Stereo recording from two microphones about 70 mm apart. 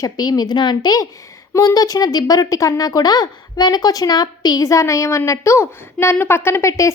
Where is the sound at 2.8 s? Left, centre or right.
Left.